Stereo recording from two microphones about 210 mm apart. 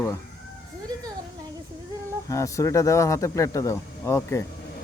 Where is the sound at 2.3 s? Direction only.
15° left (ahead or behind).